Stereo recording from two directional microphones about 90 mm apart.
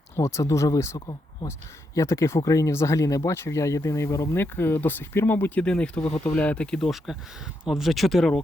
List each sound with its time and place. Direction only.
0.2 s speech: 35° left (ahead or behind)
0.9 s speech: 50° left (ahead or behind)
2.0 s speech: 30° left (ahead or behind); by 8.3 s centre (ahead or behind)